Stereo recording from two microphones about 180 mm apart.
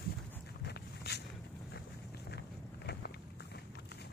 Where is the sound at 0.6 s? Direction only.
65° left (ahead or behind).